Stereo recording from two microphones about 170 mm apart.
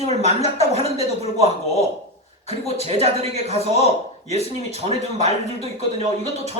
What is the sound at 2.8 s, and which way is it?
Speech, 40° right (ahead or behind).